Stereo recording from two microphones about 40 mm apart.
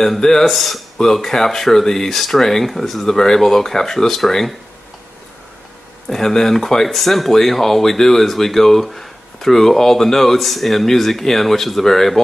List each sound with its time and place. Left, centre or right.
0.0 s speech: centre
6.0 s speech: centre